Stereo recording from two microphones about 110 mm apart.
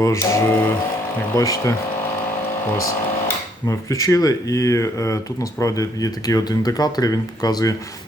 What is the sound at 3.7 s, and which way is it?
Speech, 30° left (ahead or behind).